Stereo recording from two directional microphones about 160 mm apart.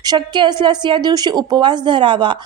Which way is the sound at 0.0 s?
25° right (ahead or behind).